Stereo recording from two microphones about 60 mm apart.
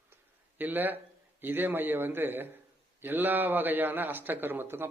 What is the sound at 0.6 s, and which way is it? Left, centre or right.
A man's voice, right.